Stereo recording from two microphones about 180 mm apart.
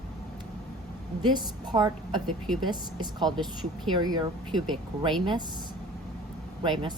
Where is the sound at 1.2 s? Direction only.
25° right (ahead or behind).